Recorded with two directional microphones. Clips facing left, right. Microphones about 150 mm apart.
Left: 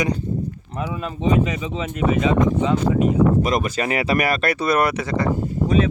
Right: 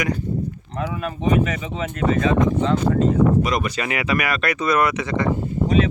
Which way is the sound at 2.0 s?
15° left (ahead or behind).